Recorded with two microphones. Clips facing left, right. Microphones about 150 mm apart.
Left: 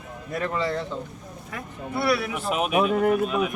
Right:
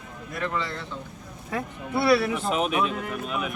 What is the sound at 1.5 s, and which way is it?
Speech, 30° right (ahead or behind).